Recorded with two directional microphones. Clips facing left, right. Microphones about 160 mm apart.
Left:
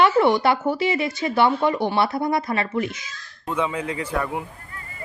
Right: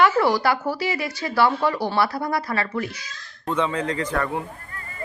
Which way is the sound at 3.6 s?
10° left (ahead or behind).